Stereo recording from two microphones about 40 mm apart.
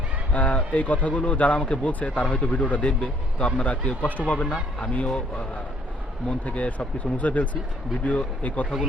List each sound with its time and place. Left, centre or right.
0.3 s speech: left
6.4 s speech: left